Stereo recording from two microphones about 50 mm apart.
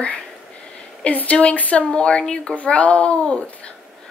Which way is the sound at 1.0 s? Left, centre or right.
Left.